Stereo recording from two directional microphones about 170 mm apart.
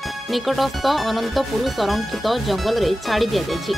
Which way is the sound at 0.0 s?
Centre (ahead or behind).